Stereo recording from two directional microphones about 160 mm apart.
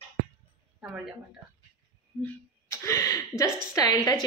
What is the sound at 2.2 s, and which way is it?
A woman's voice, 20° left (ahead or behind).